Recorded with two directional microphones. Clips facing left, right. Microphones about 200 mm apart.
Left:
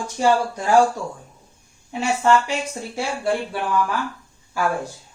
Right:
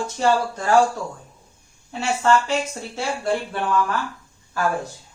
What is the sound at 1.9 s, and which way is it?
Speech, 15° left (ahead or behind).